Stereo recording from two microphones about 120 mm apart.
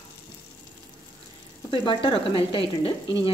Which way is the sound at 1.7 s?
45° left (ahead or behind).